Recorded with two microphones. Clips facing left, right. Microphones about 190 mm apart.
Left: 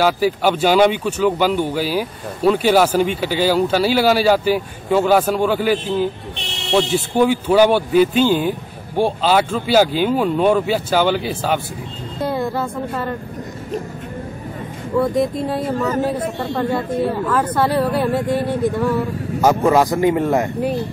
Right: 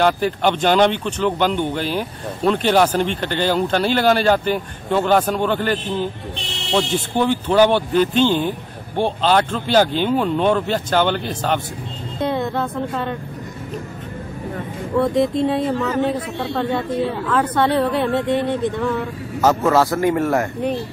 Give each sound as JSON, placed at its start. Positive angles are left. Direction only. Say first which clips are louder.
{"t": 0.0, "sound": "a woman's voice", "louder": "left 1 dB", "side_deg": 5}
{"t": 14.9, "sound": "a woman's voice", "louder": "even", "side_deg": 5}